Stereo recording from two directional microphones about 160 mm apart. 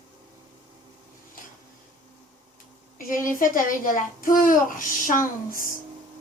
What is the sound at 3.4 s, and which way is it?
A child's voice, 60° left (ahead or behind).